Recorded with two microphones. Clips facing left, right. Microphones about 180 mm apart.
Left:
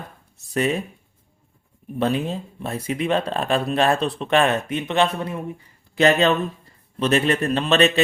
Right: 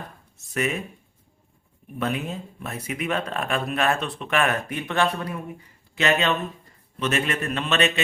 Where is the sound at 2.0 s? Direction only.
30° left (ahead or behind).